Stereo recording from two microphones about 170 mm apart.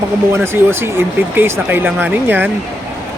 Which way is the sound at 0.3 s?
15° right (ahead or behind).